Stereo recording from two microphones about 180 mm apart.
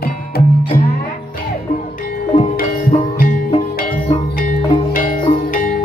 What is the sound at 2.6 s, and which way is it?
Music, 50° left (ahead or behind).